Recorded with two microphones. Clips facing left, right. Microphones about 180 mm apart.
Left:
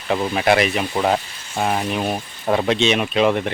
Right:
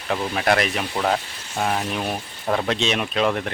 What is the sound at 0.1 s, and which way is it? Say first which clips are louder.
Speech: left 4 dB; 5° left (ahead or behind).